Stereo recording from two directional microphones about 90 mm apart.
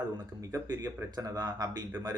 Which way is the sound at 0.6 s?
45° right (ahead or behind).